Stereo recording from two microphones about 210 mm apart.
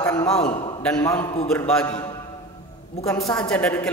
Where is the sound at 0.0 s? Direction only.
15° left (ahead or behind).